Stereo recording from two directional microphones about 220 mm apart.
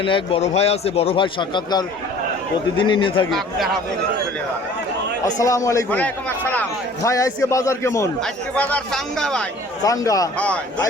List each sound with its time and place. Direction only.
0.0 s a man's voice: 25° left (ahead or behind)
3.2 s speech: centre (ahead or behind)
5.2 s a man's voice: 15° left (ahead or behind)
9.8 s a man's voice: 15° left (ahead or behind)